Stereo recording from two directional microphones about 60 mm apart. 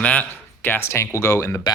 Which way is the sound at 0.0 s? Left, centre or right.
Left.